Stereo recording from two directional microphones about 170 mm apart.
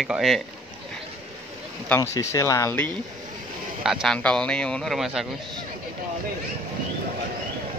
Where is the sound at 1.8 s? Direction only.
15° left (ahead or behind).